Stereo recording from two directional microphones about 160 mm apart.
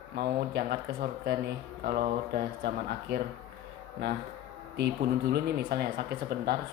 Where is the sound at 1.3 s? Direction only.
70° right (ahead or behind).